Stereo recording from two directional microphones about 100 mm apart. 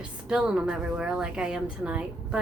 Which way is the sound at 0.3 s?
10° right (ahead or behind).